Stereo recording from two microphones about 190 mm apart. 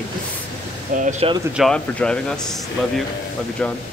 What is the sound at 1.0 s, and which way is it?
Speech, 40° right (ahead or behind).